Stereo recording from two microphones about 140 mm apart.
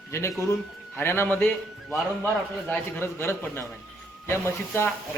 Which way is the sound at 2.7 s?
15° left (ahead or behind).